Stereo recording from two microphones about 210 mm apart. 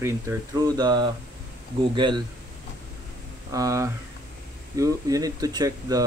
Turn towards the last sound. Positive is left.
turn(degrees=-15)  # may be behind; listen again after turning